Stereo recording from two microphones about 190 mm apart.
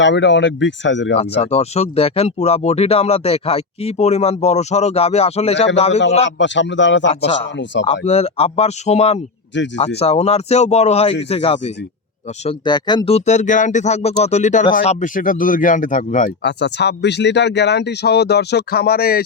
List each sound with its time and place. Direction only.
0.0 s speech: 70° left (ahead or behind)
1.4 s speech: 35° left (ahead or behind)
6.4 s speech: 70° left (ahead or behind)
7.9 s speech: 35° left (ahead or behind)
9.5 s speech: 70° left (ahead or behind)
10.0 s speech: 35° left (ahead or behind)
16.4 s speech: 65° left (ahead or behind)